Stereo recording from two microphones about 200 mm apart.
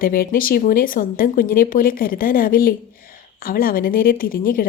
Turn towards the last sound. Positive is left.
turn(degrees=45)  # may be behind; listen again after turning